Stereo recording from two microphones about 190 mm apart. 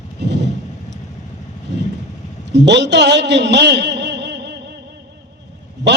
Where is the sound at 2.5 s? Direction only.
65° right (ahead or behind).